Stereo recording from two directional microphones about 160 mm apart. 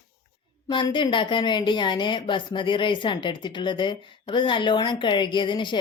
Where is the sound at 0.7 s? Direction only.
30° left (ahead or behind).